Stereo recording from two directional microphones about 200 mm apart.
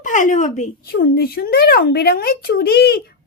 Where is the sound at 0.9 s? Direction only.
50° left (ahead or behind).